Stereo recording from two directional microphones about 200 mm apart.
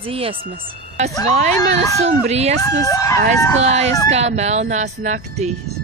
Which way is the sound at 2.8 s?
15° left (ahead or behind).